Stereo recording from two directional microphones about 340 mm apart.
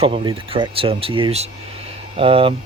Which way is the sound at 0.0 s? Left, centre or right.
Centre.